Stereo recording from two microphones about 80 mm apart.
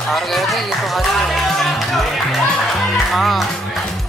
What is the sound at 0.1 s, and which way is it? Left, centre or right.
Music, centre.